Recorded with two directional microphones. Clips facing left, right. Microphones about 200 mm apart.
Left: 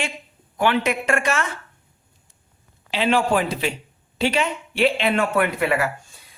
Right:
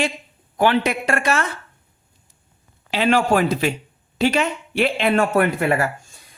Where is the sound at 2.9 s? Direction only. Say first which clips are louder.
Right 2 dB; 45° right (ahead or behind).